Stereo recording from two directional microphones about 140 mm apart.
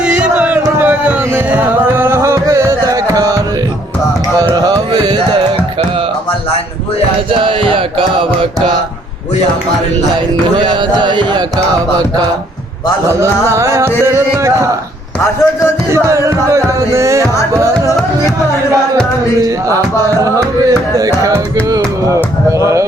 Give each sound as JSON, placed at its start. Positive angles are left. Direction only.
{"t": 0.0, "sound": "a sound", "side_deg": -5}
{"t": 0.6, "sound": "music", "side_deg": -15}
{"t": 4.4, "sound": "music", "side_deg": -30}
{"t": 7.3, "sound": "music", "side_deg": -40}
{"t": 10.6, "sound": "music", "side_deg": -35}
{"t": 13.1, "sound": "music", "side_deg": -20}
{"t": 15.9, "sound": "music", "side_deg": -20}
{"t": 19.4, "sound": "music", "side_deg": -25}